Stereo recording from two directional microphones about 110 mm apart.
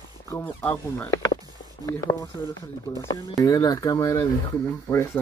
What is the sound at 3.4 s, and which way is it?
Speech, 35° left (ahead or behind).